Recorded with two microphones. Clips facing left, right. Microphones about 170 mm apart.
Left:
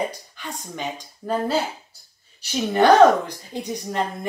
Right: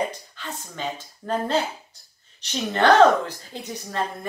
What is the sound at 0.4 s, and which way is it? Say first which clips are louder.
Speech: left 2 dB; 15° left (ahead or behind).